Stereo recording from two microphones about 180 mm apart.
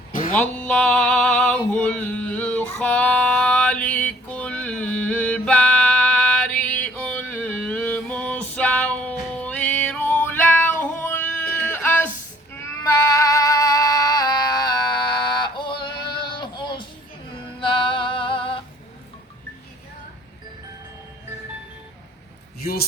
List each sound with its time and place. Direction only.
0.1 s music: 50° left (ahead or behind)
0.3 s male singing: 10° left (ahead or behind)
12.5 s female singing: 15° left (ahead or behind)
17.3 s music: 30° left (ahead or behind)
22.6 s a sound: 60° left (ahead or behind)